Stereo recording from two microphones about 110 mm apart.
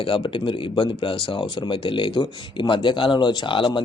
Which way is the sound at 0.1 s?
50° left (ahead or behind).